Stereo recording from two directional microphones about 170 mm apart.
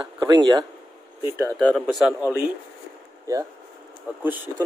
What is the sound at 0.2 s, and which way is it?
Speech, 25° right (ahead or behind).